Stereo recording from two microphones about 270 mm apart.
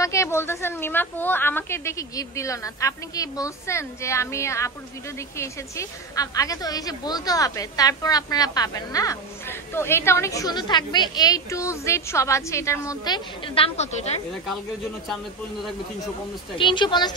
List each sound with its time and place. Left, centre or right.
0.0 s a woman's voice: centre
16.5 s a woman's voice: centre